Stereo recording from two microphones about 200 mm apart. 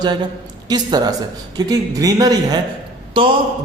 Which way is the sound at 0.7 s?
20° right (ahead or behind).